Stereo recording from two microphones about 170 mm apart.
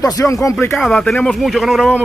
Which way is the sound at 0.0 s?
20° left (ahead or behind).